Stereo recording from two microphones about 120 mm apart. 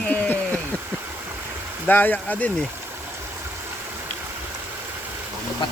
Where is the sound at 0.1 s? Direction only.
15° left (ahead or behind).